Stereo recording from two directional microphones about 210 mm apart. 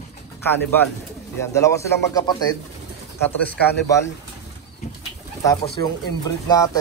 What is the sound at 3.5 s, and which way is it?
Speech, 50° left (ahead or behind).